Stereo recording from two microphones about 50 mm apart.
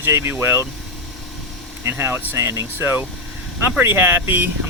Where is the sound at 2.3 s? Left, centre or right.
Right.